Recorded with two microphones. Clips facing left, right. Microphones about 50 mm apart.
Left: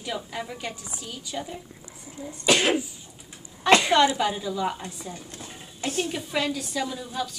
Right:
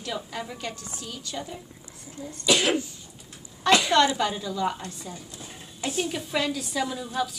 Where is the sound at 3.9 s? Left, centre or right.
Centre.